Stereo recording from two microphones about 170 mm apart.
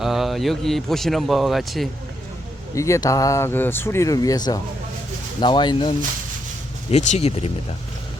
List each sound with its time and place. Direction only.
0.0 s speech: centre (ahead or behind)
2.7 s speech: 15° left (ahead or behind)
6.9 s speech: 40° left (ahead or behind)